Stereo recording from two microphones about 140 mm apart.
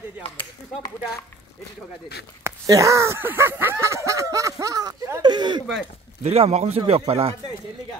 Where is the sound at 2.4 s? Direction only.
25° right (ahead or behind).